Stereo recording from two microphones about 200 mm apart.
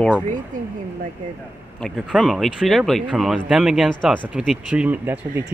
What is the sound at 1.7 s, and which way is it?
Speech, centre (ahead or behind).